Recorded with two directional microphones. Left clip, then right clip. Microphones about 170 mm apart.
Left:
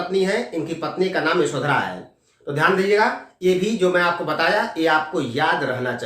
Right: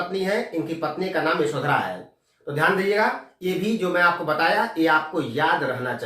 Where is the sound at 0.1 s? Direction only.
20° left (ahead or behind).